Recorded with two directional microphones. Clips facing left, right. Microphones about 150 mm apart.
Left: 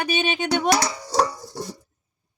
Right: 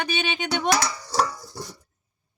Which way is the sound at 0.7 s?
25° left (ahead or behind).